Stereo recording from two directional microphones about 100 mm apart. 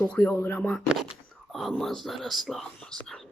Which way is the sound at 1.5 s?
Centre (ahead or behind).